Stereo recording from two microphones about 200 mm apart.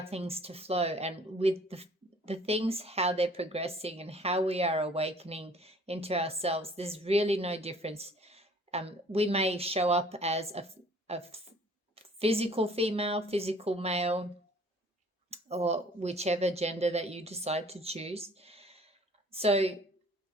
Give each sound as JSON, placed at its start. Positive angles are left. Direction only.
{"t": 0.0, "sound": "speech", "side_deg": -30}
{"t": 15.3, "sound": "speech", "side_deg": -30}